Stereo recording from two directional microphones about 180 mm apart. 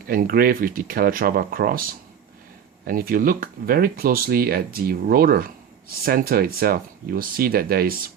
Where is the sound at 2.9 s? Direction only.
50° right (ahead or behind).